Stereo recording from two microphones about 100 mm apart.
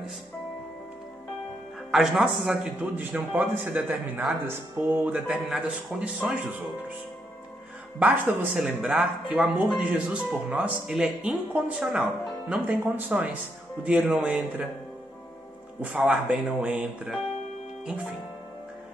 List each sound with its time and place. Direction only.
1.9 s speech: 5° right (ahead or behind)
2.5 s a man's voice: 15° right (ahead or behind)
8.0 s a man's voice: 15° right (ahead or behind)
12.4 s a man's voice: 15° right (ahead or behind)
15.8 s a man's voice: 10° right (ahead or behind)